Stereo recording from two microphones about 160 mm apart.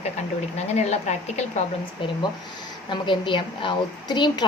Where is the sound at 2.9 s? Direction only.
30° left (ahead or behind).